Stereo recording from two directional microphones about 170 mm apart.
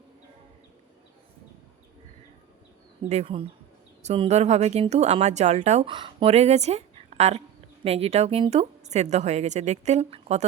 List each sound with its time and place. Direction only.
3.1 s a woman's voice: 35° right (ahead or behind)